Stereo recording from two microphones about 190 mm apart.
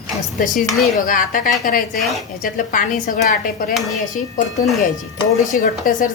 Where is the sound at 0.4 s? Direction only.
45° left (ahead or behind).